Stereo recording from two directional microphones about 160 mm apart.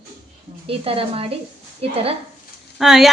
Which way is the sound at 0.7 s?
35° right (ahead or behind).